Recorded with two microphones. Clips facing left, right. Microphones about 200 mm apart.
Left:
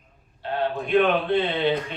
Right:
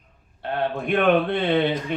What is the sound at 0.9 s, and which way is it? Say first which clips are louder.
Speech: right 1 dB; 55° right (ahead or behind).